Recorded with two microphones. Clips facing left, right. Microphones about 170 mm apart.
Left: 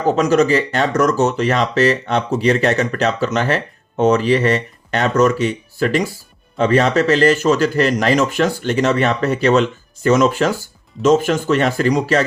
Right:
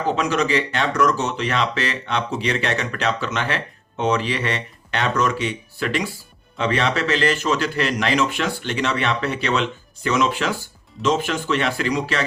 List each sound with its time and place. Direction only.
0.0 s speech: 45° left (ahead or behind)